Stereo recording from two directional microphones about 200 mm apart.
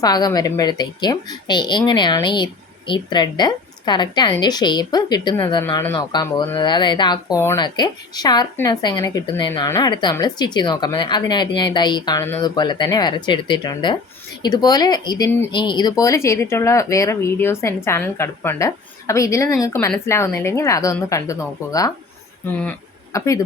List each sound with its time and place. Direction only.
0.0 s a woman's voice: 20° left (ahead or behind)
22.4 s speech: 5° left (ahead or behind)